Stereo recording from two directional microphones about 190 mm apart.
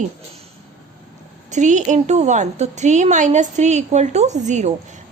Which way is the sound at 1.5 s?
40° right (ahead or behind).